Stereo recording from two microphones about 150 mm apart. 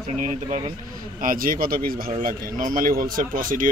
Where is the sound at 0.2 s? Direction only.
55° right (ahead or behind).